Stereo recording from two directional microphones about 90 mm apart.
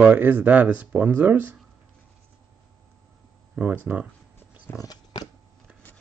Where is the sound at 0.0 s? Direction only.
20° right (ahead or behind).